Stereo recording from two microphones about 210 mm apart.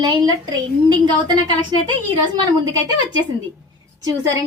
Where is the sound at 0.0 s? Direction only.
20° right (ahead or behind).